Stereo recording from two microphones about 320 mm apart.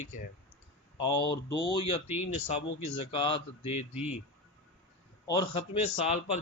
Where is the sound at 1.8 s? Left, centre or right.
Left.